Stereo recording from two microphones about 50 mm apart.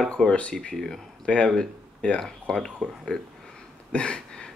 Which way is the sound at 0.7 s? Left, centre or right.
Centre.